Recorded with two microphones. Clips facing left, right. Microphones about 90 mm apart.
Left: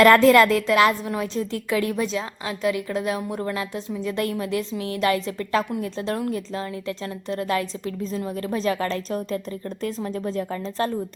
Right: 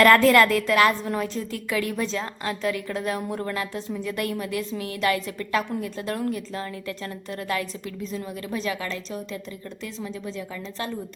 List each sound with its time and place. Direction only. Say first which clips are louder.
0.0 s a woman's voice: left 2 dB; 20° left (ahead or behind); by 10.9 s 40° left (ahead or behind)